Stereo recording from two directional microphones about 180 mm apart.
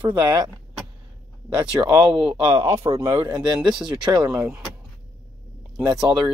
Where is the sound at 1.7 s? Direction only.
20° right (ahead or behind).